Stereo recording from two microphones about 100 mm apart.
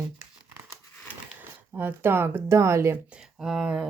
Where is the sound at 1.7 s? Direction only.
20° right (ahead or behind).